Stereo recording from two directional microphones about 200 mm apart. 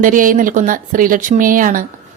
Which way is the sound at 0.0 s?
40° right (ahead or behind).